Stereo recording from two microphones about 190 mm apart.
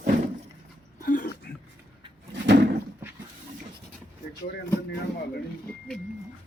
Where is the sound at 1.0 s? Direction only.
45° left (ahead or behind).